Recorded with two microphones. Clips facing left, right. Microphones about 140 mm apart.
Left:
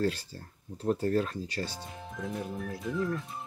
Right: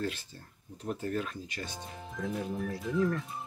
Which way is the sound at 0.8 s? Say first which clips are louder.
Left 6 dB; 35° left (ahead or behind).